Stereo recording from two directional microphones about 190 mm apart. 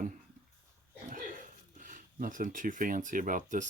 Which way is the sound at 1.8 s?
45° right (ahead or behind).